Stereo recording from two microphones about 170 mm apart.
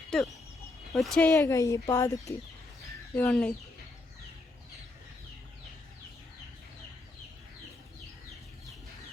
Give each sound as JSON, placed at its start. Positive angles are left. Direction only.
{"t": 0.1, "sound": "speech", "side_deg": 0}
{"t": 1.4, "sound": "speech", "side_deg": 20}
{"t": 3.2, "sound": "speech", "side_deg": 5}